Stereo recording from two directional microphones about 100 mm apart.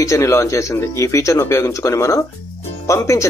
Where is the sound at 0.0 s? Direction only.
30° left (ahead or behind).